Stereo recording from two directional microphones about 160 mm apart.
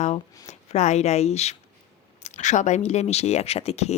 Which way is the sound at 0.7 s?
45° left (ahead or behind).